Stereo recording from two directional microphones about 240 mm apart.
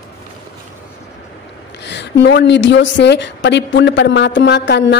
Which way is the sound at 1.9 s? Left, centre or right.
Left.